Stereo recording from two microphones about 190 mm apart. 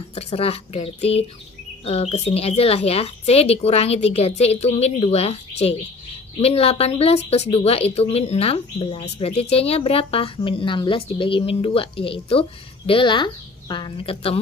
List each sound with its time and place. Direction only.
0.1 s a woman's voice: 35° left (ahead or behind)
6.4 s a woman's voice: 30° left (ahead or behind)